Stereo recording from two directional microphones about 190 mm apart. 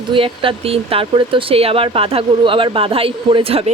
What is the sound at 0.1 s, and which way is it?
Speech, 30° right (ahead or behind).